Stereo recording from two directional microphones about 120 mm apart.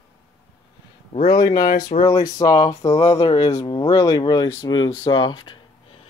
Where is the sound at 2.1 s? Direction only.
30° left (ahead or behind).